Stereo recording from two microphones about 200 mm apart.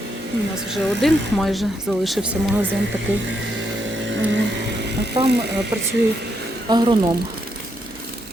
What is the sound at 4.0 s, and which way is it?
Vehicle, 65° right (ahead or behind).